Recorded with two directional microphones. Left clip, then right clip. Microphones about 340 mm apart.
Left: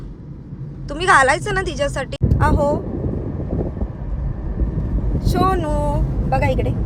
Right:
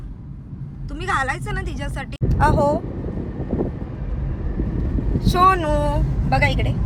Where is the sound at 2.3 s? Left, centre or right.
Centre.